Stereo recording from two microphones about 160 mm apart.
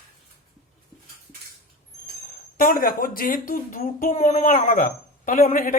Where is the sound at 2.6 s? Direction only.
60° left (ahead or behind).